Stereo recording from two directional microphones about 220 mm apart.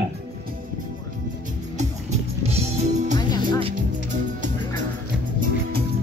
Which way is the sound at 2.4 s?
30° right (ahead or behind).